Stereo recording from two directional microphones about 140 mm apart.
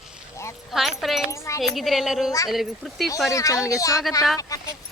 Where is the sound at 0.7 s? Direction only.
Centre (ahead or behind).